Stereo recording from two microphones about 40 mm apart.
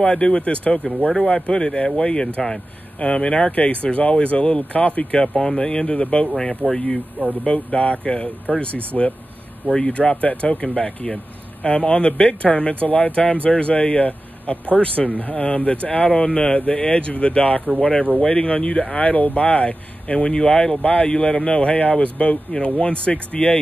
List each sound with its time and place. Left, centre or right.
0.0 s speech: left
5.2 s speech: centre
6.3 s speech: centre; by 8.6 s left
8.9 s speech: centre
9.9 s speech: left
18.9 s speech: left